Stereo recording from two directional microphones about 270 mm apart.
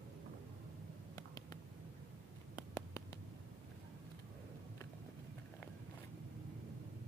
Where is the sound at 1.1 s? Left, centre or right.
Centre.